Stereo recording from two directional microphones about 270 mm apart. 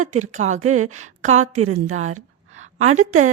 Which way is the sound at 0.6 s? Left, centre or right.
Right.